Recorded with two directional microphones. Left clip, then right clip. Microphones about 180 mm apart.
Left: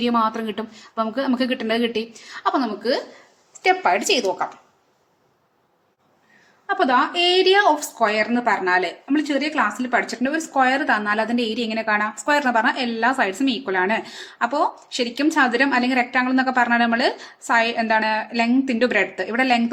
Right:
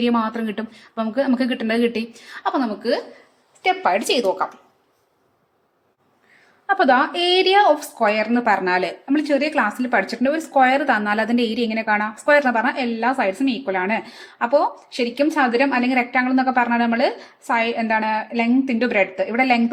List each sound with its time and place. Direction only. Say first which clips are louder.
0.0 s a woman's voice: left 1 dB; 15° right (ahead or behind)
6.7 s a woman's voice: right 2 dB; 25° right (ahead or behind)